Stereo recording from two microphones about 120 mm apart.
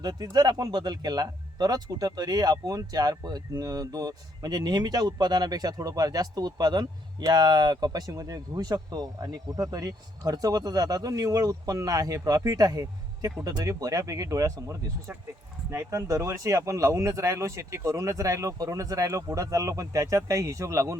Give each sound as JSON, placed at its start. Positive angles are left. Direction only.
{"t": 0.0, "sound": "speech", "side_deg": -35}